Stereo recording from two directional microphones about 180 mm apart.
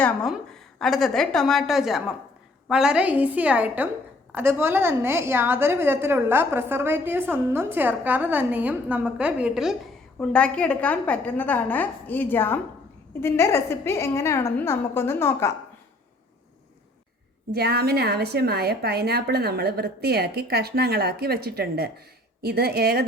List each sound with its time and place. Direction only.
0.0 s a woman's voice: 5° left (ahead or behind)
10.2 s a woman's voice: 5° left (ahead or behind)
17.5 s a woman's voice: 60° right (ahead or behind)